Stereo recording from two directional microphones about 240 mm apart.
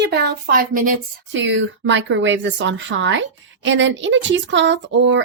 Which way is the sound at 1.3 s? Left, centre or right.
Right.